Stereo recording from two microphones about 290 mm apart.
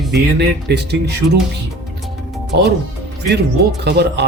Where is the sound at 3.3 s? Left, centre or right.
Right.